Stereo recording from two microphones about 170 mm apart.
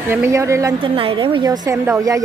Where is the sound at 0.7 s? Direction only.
30° right (ahead or behind).